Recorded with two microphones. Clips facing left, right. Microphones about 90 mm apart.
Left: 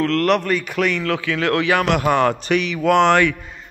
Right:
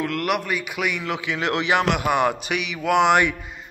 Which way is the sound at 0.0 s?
10° right (ahead or behind).